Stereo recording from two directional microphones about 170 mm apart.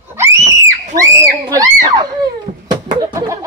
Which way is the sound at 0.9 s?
20° right (ahead or behind).